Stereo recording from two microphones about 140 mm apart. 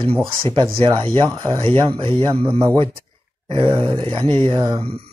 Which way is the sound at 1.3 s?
25° right (ahead or behind).